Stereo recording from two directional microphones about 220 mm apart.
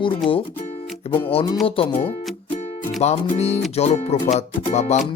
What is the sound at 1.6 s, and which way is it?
Speech, 25° left (ahead or behind).